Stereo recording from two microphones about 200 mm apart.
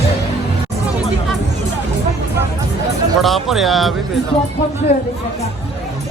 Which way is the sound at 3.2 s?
Centre (ahead or behind).